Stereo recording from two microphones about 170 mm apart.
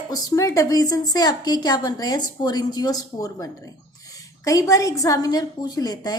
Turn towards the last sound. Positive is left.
turn(degrees=25)  # may be behind; listen again after turning